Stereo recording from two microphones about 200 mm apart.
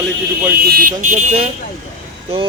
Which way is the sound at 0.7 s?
40° right (ahead or behind).